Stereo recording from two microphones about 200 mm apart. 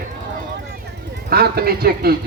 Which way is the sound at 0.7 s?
50° right (ahead or behind).